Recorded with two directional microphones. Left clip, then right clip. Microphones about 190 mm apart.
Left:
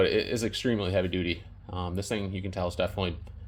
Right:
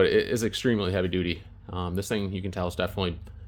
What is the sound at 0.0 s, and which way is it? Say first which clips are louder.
Speech: right 3 dB; 45° right (ahead or behind).